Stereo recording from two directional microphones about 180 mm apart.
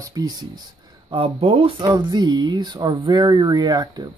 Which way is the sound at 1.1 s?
30° right (ahead or behind).